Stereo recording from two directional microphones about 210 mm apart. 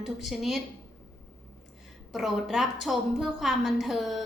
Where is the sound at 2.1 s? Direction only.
Centre (ahead or behind).